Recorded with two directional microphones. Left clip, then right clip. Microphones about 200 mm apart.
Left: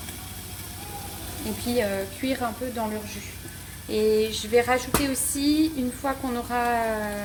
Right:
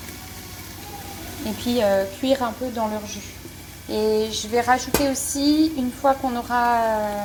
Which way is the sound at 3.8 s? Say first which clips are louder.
Right 1 dB; centre (ahead or behind).